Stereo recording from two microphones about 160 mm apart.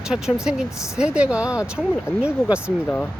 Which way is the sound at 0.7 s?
20° left (ahead or behind).